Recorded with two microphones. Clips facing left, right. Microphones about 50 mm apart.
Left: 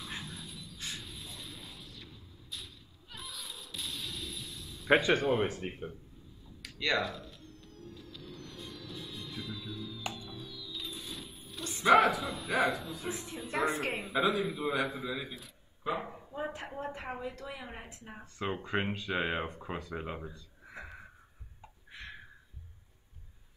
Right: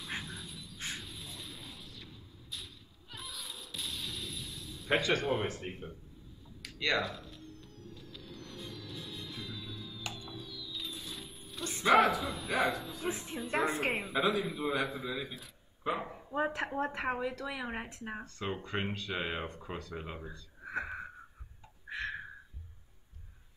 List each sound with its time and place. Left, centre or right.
0.2 s a sound: centre
0.7 s shatter: right
1.0 s a sound: centre
5.2 s a man's voice: centre
6.6 s a sound: centre
10.1 s music: centre
11.8 s a man's voice: centre
13.1 s a woman's voice: right
13.4 s a man's voice: centre
15.8 s speech: centre
16.5 s speech: right
18.2 s speech: centre
20.7 s wheeze: right
21.8 s a sound: right